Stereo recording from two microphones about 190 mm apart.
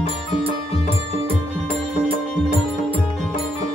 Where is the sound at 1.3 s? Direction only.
30° right (ahead or behind).